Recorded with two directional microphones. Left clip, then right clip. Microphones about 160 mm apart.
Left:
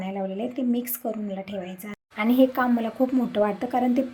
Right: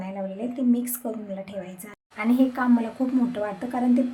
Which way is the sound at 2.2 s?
15° left (ahead or behind).